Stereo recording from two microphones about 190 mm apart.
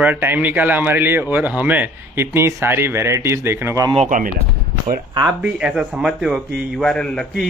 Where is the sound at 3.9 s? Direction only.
40° right (ahead or behind).